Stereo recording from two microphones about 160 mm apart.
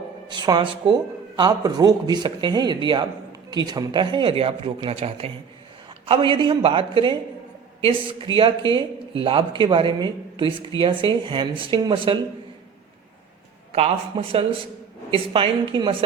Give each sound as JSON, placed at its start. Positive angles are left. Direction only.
{"t": 0.3, "sound": "speech", "side_deg": -25}
{"t": 13.7, "sound": "speech", "side_deg": -40}